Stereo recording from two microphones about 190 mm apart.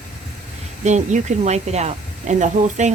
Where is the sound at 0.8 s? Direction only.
40° right (ahead or behind).